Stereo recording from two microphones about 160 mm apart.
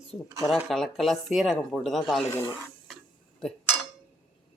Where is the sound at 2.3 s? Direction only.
15° left (ahead or behind).